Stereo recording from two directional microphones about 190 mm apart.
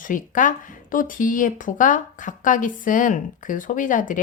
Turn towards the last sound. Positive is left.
turn(degrees=45)  # may be behind; listen again after turning